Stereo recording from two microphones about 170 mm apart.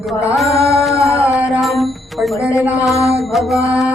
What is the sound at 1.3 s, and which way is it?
Mantra, centre (ahead or behind).